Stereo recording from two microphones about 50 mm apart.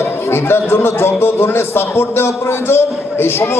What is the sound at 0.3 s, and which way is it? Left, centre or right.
A man's voice, left.